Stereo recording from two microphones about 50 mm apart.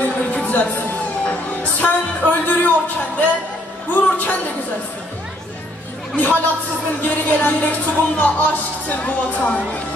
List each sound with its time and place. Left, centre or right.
0.0 s music: left
3.9 s a sound: left
6.1 s speech: left